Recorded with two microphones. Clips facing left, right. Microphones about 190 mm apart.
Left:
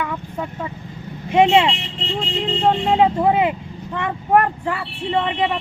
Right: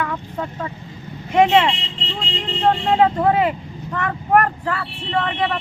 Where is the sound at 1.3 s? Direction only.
20° left (ahead or behind).